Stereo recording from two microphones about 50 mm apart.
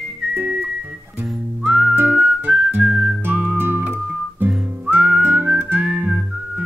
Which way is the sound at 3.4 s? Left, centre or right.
Right.